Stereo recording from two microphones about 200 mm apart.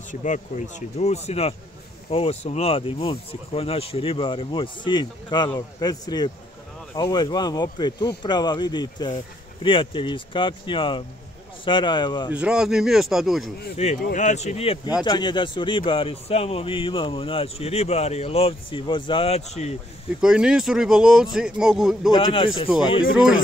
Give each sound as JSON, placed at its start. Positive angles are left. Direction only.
{"t": 0.1, "sound": "a man's voice", "side_deg": 40}
{"t": 12.3, "sound": "speech", "side_deg": -5}
{"t": 13.8, "sound": "a man's voice", "side_deg": 35}
{"t": 20.2, "sound": "speech", "side_deg": -5}
{"t": 22.1, "sound": "a man's voice", "side_deg": 25}